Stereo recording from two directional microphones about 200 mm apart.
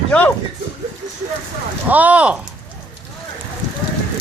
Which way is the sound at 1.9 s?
5° right (ahead or behind).